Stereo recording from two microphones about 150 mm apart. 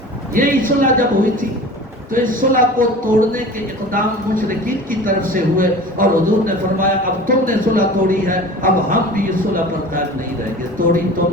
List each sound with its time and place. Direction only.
0.3 s a man's voice: 65° right (ahead or behind)